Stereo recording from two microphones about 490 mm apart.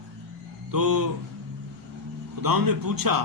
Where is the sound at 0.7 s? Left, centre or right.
Right.